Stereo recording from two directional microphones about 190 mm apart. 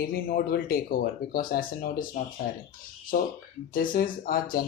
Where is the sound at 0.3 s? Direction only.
50° left (ahead or behind).